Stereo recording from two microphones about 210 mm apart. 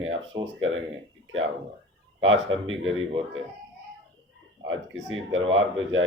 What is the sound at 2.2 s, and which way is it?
Speech, 65° right (ahead or behind).